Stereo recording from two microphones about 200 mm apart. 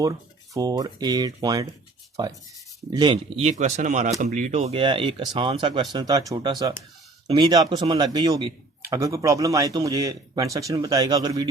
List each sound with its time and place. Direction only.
0.5 s speech: 20° right (ahead or behind)
2.9 s a man's voice: 20° right (ahead or behind)